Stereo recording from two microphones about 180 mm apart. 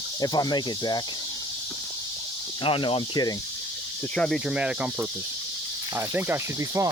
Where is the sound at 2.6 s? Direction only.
30° left (ahead or behind).